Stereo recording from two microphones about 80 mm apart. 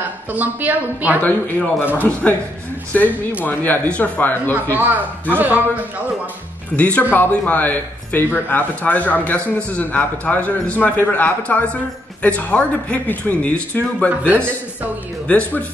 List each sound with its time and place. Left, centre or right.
0.3 s a woman's voice: right
1.2 s a man's voice: left
4.7 s a woman's voice: right
6.8 s a man's voice: centre
14.3 s a woman's voice: right
15.2 s a man's voice: centre